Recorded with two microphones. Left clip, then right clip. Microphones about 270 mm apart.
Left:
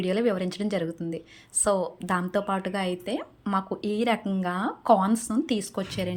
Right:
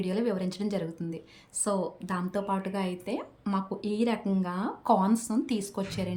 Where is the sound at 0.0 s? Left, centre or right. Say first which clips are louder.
Left 5 dB; centre.